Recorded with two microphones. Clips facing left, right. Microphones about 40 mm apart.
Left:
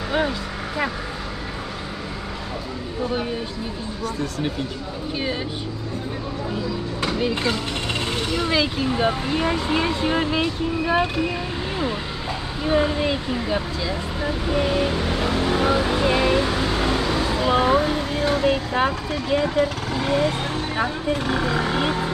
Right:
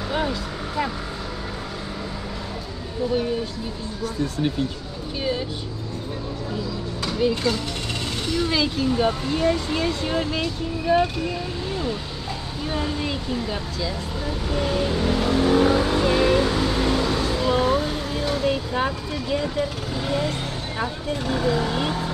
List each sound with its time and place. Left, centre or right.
0.1 s vehicle: centre
7.0 s speech: centre